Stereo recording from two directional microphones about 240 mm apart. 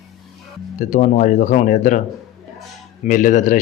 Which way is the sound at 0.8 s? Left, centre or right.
Left.